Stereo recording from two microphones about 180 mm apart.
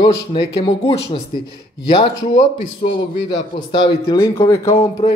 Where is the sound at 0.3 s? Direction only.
25° left (ahead or behind).